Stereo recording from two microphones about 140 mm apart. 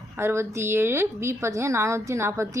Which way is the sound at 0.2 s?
20° right (ahead or behind).